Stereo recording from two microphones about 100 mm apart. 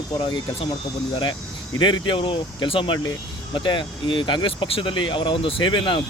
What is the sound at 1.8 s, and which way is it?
Speech, 50° left (ahead or behind).